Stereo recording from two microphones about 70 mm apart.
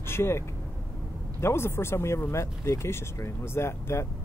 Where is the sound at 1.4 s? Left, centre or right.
Left.